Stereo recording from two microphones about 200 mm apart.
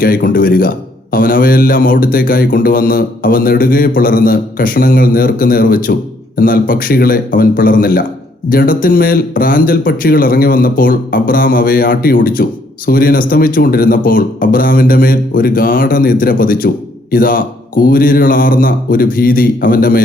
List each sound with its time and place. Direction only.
0.0 s a man's voice: 45° left (ahead or behind)